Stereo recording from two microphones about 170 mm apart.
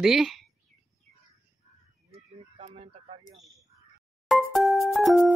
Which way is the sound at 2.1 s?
35° right (ahead or behind).